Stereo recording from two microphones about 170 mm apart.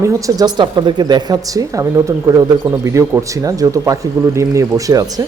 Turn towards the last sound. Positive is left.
turn(degrees=-20)  # may be behind; listen again after turning